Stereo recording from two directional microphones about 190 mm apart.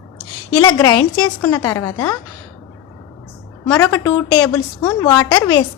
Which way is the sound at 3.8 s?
20° left (ahead or behind).